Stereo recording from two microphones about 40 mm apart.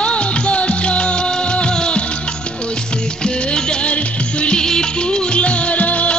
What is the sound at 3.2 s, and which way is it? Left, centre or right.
Music, left.